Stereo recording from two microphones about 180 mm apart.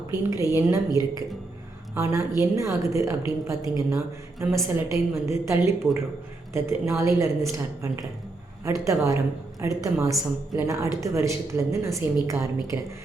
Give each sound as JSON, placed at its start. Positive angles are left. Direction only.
{"t": 0.1, "sound": "a woman's voice", "side_deg": -15}